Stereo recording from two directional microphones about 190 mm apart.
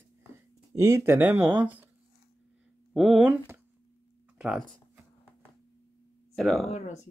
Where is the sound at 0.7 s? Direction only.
15° right (ahead or behind).